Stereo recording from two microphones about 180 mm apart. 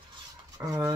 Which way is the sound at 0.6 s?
15° right (ahead or behind).